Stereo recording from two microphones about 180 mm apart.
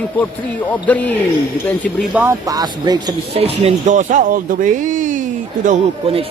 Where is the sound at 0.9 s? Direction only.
10° left (ahead or behind).